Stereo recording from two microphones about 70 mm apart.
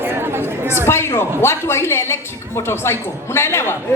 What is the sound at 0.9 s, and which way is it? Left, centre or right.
A woman's voice, left.